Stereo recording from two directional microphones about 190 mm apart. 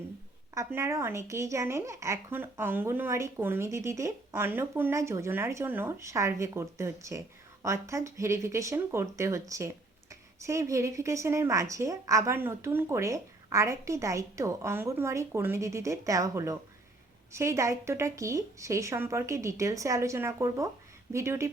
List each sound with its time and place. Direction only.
0.5 s speech: 15° right (ahead or behind)